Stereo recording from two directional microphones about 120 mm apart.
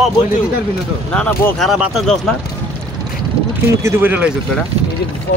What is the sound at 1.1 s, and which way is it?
Speech, 10° left (ahead or behind).